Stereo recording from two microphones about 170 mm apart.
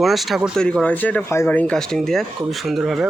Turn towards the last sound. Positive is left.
turn(degrees=-5)  # may be behind; listen again after turning